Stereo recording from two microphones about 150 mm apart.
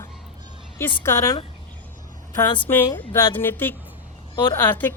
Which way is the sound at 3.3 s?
15° left (ahead or behind).